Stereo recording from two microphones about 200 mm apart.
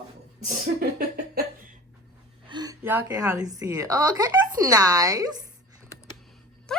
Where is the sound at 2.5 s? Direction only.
20° right (ahead or behind).